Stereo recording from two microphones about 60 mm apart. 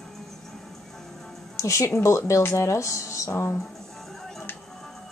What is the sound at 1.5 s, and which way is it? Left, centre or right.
Speech, left.